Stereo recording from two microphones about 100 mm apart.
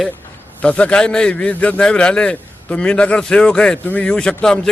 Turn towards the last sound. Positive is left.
turn(degrees=10)  # may be behind; listen again after turning